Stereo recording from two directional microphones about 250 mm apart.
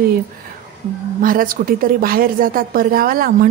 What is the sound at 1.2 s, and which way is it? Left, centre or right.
A woman's voice, right.